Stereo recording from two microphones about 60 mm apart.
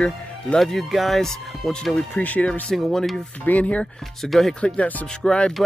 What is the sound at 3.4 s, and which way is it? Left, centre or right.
Speech, left.